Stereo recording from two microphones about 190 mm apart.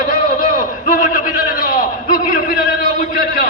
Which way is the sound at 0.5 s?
45° left (ahead or behind).